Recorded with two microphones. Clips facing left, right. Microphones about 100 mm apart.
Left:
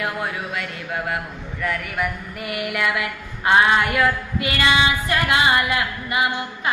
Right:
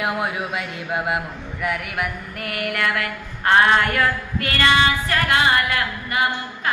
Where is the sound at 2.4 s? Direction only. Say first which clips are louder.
Even; 5° left (ahead or behind).